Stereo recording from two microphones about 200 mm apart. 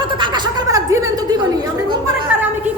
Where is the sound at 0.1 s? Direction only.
25° right (ahead or behind).